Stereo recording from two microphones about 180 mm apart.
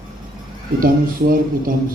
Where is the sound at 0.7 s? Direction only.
55° right (ahead or behind).